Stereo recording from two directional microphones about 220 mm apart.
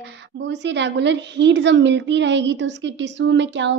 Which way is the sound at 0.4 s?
55° right (ahead or behind).